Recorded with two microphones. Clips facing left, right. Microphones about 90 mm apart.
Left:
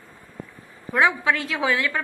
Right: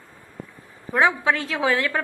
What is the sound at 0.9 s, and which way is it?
A woman's voice, 30° right (ahead or behind).